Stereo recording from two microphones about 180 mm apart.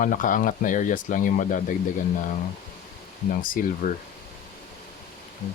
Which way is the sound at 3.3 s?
50° left (ahead or behind).